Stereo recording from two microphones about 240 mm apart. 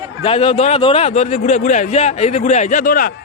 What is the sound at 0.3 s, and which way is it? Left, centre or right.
A man's voice, left.